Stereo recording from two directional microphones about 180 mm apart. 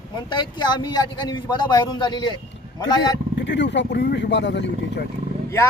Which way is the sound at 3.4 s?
75° left (ahead or behind).